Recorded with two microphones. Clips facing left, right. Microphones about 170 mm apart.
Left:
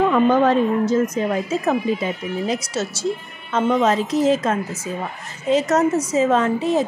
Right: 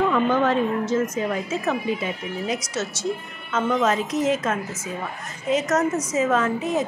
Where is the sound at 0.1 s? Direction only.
40° left (ahead or behind).